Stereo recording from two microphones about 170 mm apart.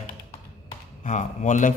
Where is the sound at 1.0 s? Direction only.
45° left (ahead or behind).